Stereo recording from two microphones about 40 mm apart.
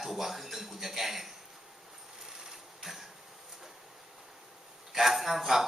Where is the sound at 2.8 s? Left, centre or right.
Centre.